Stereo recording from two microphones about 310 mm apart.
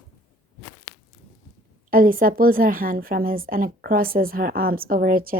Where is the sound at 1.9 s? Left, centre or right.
Right.